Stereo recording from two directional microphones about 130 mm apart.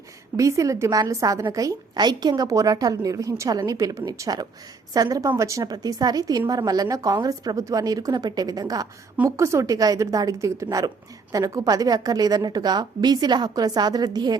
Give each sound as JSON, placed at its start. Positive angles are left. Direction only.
{"t": 0.3, "sound": "a woman's voice", "side_deg": -25}